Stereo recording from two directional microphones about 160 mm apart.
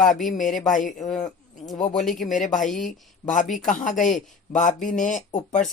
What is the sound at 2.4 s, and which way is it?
Speech, 55° left (ahead or behind).